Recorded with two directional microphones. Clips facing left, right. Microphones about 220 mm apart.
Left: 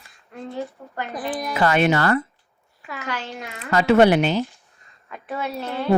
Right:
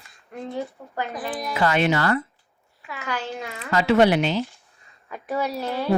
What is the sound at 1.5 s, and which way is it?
Speech, 50° left (ahead or behind).